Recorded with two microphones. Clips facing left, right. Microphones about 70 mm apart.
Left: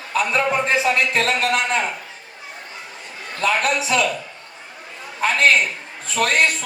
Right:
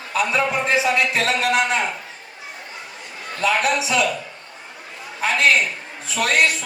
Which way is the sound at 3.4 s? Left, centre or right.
Left.